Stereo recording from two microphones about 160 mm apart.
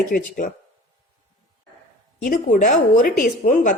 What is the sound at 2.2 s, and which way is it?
Speech, 55° left (ahead or behind).